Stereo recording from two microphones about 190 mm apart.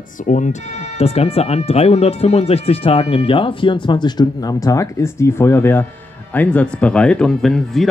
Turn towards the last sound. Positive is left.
turn(degrees=0)  # may be behind; listen again after turning